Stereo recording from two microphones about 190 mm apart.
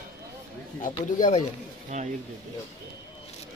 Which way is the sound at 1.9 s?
40° right (ahead or behind).